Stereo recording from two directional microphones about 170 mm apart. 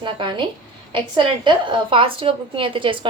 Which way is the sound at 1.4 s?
30° right (ahead or behind).